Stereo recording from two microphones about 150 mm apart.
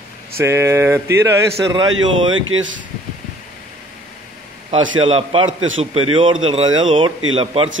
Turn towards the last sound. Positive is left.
turn(degrees=-35)  # may be behind; listen again after turning